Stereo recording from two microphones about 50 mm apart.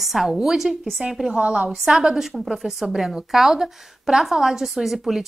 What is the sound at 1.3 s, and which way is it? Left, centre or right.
Speech, right.